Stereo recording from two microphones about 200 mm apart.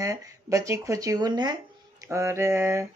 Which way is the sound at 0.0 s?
15° right (ahead or behind).